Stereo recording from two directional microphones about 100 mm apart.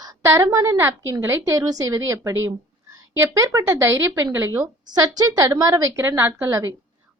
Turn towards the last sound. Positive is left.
turn(degrees=-30)  # may be behind; listen again after turning